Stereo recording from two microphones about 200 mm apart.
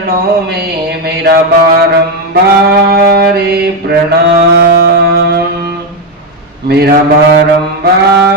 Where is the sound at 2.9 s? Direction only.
50° right (ahead or behind).